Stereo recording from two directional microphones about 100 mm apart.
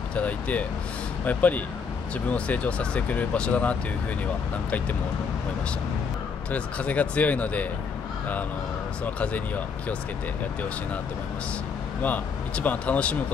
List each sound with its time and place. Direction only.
0.1 s speech: 15° left (ahead or behind)
6.5 s speech: 15° left (ahead or behind)
9.0 s speech: 15° left (ahead or behind)
12.0 s speech: 15° left (ahead or behind)